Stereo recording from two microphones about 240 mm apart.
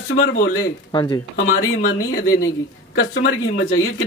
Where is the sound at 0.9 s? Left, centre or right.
Centre.